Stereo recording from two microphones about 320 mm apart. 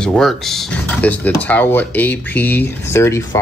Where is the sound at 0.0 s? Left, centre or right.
Centre.